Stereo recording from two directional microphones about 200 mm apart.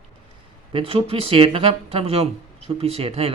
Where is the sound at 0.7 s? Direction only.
30° right (ahead or behind).